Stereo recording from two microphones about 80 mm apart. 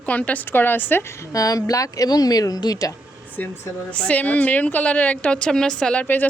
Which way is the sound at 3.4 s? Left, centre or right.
Left.